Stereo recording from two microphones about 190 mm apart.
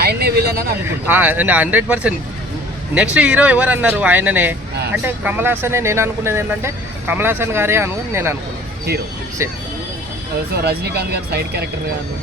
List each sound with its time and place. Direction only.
0.0 s speech: 55° right (ahead or behind)
0.9 s speech: 10° right (ahead or behind)
8.9 s speech: 55° right (ahead or behind)
9.4 s speech: 15° right (ahead or behind)
10.5 s speech: 55° right (ahead or behind)